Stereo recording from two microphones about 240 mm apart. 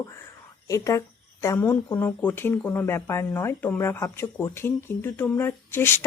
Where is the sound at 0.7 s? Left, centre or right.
Centre.